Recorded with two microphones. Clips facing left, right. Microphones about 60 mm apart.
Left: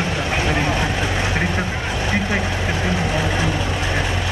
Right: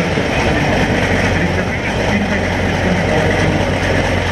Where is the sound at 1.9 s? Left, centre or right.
Right.